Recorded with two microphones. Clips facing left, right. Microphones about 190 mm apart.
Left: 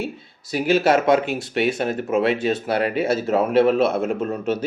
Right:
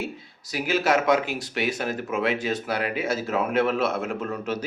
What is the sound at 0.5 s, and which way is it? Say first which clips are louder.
Speech: left 5 dB; 30° left (ahead or behind).